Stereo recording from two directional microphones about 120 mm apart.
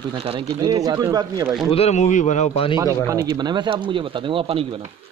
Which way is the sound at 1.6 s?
55° left (ahead or behind).